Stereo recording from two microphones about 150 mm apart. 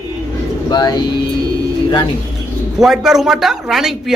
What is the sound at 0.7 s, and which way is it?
Speech, 25° left (ahead or behind).